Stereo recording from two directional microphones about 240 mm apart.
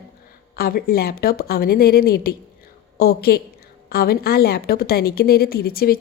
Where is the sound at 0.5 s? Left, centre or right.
Left.